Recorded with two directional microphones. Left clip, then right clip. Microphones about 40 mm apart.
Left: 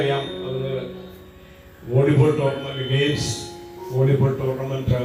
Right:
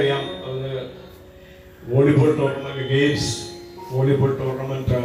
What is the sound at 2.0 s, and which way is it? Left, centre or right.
Speech, centre.